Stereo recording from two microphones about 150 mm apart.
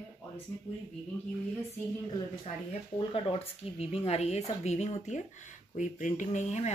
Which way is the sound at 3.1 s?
40° left (ahead or behind).